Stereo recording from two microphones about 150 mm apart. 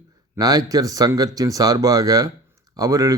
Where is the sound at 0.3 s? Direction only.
25° right (ahead or behind).